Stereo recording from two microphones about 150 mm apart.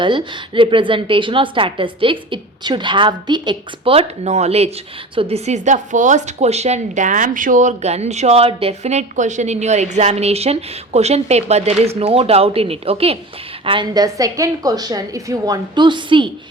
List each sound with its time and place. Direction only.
0.0 s a woman's voice: 30° right (ahead or behind)
13.7 s a woman's voice: 30° right (ahead or behind)